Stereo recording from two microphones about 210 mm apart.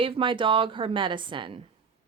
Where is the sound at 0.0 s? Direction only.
25° right (ahead or behind).